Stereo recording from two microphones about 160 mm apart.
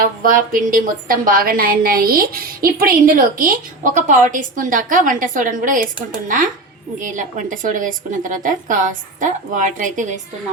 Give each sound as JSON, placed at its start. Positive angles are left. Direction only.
{"t": 0.0, "sound": "a woman's voice", "side_deg": -60}